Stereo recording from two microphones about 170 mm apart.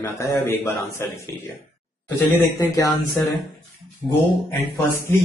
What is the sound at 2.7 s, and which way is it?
Speech, 25° left (ahead or behind).